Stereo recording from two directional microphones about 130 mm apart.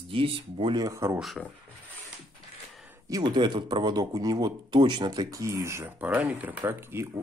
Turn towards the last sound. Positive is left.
turn(degrees=-15)  # may be behind; listen again after turning